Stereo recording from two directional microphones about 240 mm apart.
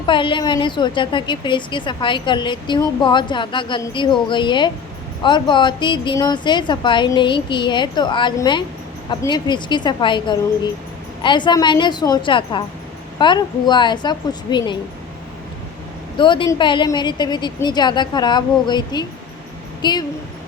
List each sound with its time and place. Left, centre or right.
0.0 s a woman's voice: left
16.1 s a woman's voice: centre